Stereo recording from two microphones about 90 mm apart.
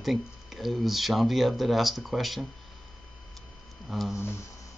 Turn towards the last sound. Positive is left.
turn(degrees=0)  # may be behind; listen again after turning